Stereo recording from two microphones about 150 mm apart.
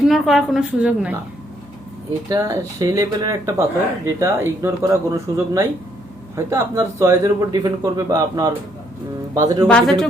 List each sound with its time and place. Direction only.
0.1 s a woman's voice: centre (ahead or behind)
2.3 s a man's voice: 25° right (ahead or behind)
9.6 s a woman's voice: 5° left (ahead or behind)